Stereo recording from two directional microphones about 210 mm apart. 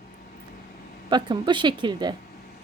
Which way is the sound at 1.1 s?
20° right (ahead or behind).